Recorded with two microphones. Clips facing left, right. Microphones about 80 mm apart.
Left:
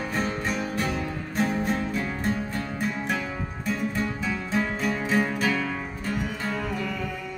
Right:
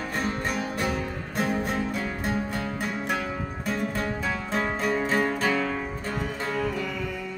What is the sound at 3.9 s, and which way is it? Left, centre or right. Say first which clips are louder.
Music: even; right.